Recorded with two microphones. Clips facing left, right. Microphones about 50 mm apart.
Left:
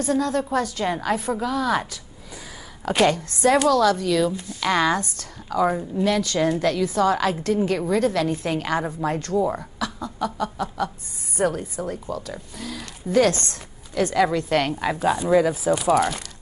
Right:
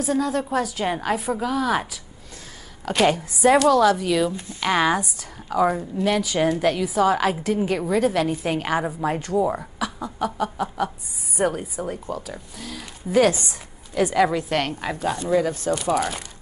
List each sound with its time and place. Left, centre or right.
0.0 s a woman's voice: centre
2.8 s a woman's voice: centre
3.1 s a woman's voice: centre
10.1 s a sound: right
11.3 s a woman's voice: centre
14.9 s speech: centre